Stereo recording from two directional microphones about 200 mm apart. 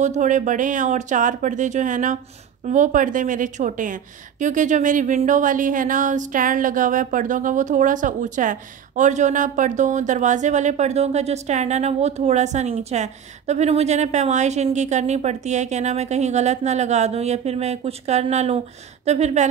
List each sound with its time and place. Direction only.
0.0 s a woman's voice: 35° right (ahead or behind)